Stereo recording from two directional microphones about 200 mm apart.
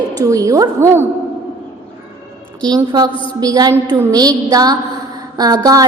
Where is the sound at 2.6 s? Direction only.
20° right (ahead or behind).